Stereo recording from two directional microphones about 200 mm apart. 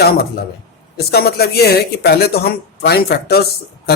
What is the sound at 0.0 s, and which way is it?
A man's voice, 50° left (ahead or behind).